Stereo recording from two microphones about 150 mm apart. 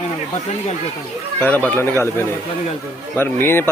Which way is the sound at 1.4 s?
10° left (ahead or behind).